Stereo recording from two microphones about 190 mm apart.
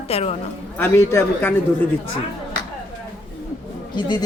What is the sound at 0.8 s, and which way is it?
Speech, 10° left (ahead or behind).